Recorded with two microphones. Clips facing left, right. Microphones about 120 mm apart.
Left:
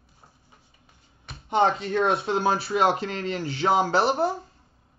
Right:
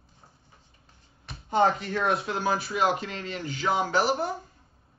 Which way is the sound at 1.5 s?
25° left (ahead or behind).